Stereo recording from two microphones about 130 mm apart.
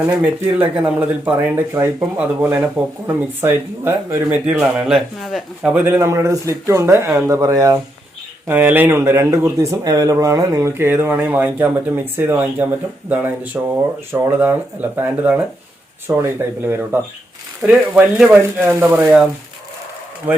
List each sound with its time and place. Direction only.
0.1 s a man's voice: 10° right (ahead or behind); by 7.8 s 30° right (ahead or behind)
8.4 s a man's voice: 15° right (ahead or behind)